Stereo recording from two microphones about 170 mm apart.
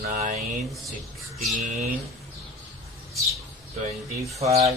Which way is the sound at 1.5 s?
45° right (ahead or behind).